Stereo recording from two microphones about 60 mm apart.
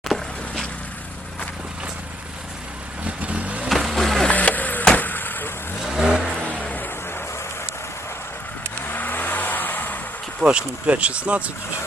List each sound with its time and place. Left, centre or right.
0.1 s vehicle: centre
3.2 s vehicle: right
3.7 s music: centre
3.9 s skateboard: centre
4.3 s vehicle: left
5.8 s vehicle: centre
6.4 s vehicle: centre
8.8 s car: left
10.4 s speech: centre